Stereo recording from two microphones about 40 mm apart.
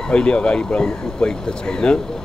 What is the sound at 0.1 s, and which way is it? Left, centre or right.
Speech, left.